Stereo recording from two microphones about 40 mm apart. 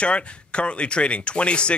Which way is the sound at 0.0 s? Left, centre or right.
Left.